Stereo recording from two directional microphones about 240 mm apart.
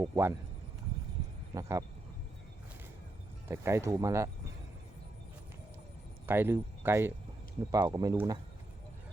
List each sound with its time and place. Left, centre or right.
0.0 s speech: centre
1.5 s speech: centre
3.5 s speech: centre
6.2 s speech: centre